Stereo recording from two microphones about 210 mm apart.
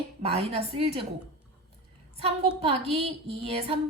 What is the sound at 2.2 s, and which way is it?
A woman's voice, 30° right (ahead or behind).